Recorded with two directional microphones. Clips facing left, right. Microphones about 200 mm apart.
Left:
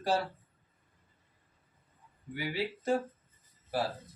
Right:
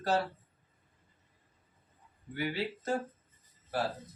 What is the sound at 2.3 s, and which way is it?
Speech, 10° left (ahead or behind).